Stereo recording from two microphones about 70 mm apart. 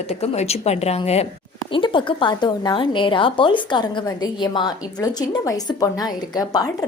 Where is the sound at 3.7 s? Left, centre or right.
Left.